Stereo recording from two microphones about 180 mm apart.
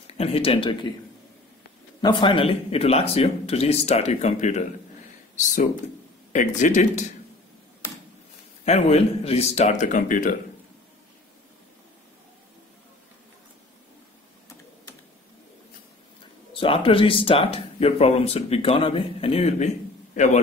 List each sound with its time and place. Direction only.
0.0 s a man's voice: 35° left (ahead or behind)
2.0 s speech: 25° left (ahead or behind); by 7.1 s 45° left (ahead or behind)
7.8 s a sound: 15° left (ahead or behind)
8.6 s speech: 35° left (ahead or behind)
16.5 s speech: 30° left (ahead or behind)